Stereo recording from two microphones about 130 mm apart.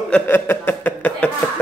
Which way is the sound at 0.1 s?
15° left (ahead or behind).